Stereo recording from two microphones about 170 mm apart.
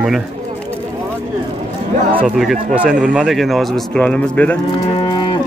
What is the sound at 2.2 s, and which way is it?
A man's voice, centre (ahead or behind).